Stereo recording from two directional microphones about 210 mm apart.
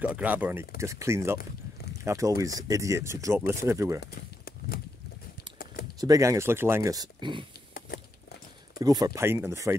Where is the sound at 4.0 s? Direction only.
45° left (ahead or behind).